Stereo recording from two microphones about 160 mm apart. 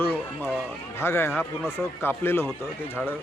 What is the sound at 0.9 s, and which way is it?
Speech, 15° left (ahead or behind).